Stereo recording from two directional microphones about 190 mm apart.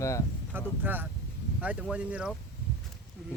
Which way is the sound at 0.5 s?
10° right (ahead or behind).